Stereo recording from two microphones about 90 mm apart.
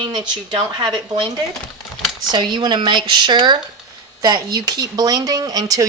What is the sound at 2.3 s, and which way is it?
Speech, 60° right (ahead or behind).